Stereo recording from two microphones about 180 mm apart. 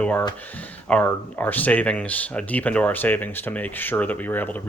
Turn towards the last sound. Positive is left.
turn(degrees=10)  # may be behind; listen again after turning